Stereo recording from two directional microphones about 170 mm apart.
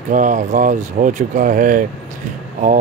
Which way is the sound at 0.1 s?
50° right (ahead or behind).